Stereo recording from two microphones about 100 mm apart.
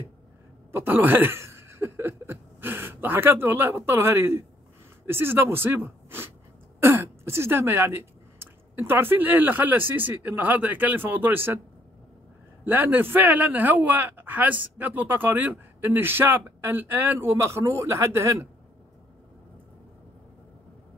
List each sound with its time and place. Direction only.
0.7 s a man's voice: 20° right (ahead or behind)
12.6 s a man's voice: 20° right (ahead or behind)